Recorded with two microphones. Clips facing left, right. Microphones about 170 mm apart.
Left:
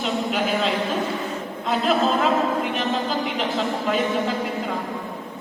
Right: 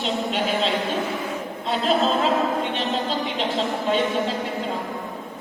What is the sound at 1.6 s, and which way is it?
A woman's voice, 30° right (ahead or behind).